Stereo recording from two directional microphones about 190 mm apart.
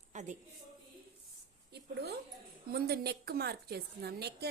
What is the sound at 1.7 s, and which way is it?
A woman's voice, 60° right (ahead or behind).